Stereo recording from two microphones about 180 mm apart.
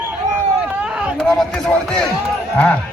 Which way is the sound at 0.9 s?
5° right (ahead or behind).